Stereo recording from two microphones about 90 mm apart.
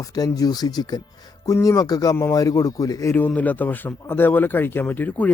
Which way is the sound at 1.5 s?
40° left (ahead or behind).